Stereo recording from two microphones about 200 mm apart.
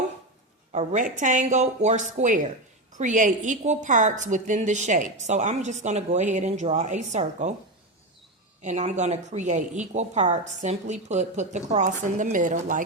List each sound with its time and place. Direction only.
0.7 s a woman's voice: 35° right (ahead or behind)
8.6 s a woman's voice: 35° right (ahead or behind)